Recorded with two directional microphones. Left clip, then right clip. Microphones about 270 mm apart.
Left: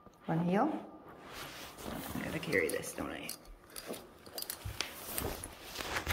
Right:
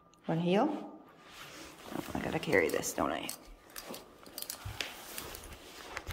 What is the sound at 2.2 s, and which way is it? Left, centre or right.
Speech, centre.